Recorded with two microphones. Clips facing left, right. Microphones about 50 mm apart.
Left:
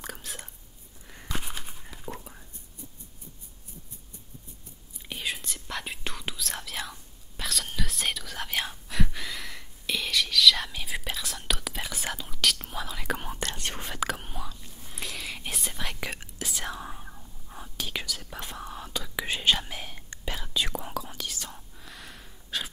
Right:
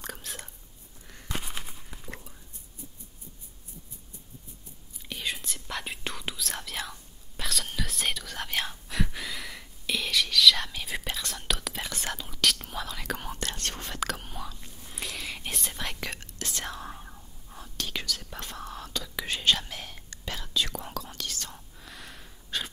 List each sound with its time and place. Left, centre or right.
0.0 s whispering: centre
2.1 s whispering: left
5.0 s whispering: centre